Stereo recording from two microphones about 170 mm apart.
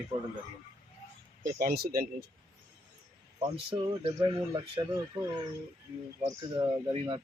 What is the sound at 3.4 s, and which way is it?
Speech, 30° right (ahead or behind).